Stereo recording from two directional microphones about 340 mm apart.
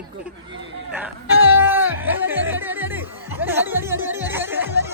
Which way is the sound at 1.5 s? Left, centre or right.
Centre.